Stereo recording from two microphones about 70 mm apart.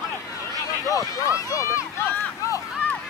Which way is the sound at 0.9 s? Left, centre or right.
Left.